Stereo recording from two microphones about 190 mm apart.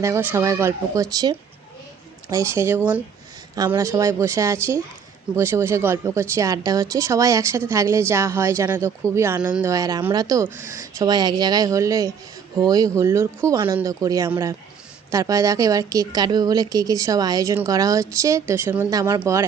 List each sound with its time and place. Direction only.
0.0 s a woman's voice: 15° right (ahead or behind)